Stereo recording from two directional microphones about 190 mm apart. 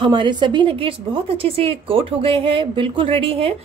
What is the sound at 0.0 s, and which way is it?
A woman's voice, 25° right (ahead or behind).